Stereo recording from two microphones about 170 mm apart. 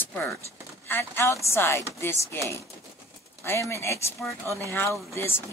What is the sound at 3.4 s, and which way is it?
Speech, 15° left (ahead or behind).